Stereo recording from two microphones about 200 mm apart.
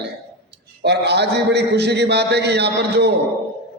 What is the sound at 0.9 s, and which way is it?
A man's voice, 55° right (ahead or behind).